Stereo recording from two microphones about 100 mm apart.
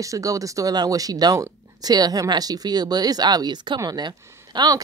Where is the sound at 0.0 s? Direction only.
35° right (ahead or behind).